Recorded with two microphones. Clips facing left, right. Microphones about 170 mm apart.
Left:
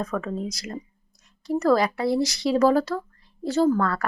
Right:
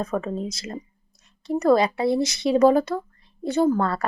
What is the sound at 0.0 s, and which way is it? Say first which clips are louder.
Speech: right 2 dB; 25° right (ahead or behind).